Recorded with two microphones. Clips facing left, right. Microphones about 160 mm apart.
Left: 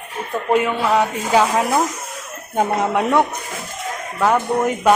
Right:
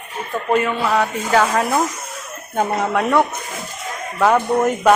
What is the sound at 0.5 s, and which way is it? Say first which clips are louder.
A woman's voice: left 1 dB; 15° left (ahead or behind).